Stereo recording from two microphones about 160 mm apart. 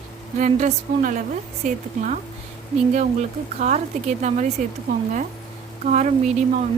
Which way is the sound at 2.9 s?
50° right (ahead or behind).